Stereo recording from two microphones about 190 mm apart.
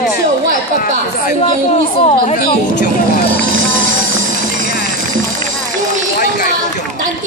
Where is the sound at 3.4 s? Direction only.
90° right.